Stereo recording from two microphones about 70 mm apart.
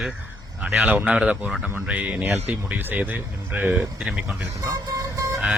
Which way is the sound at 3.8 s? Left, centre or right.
Centre.